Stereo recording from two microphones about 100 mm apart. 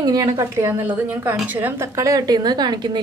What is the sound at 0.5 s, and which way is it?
A woman's voice, 20° right (ahead or behind).